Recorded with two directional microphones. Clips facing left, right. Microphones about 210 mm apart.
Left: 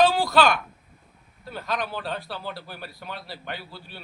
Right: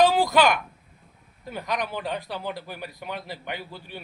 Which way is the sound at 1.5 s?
15° right (ahead or behind).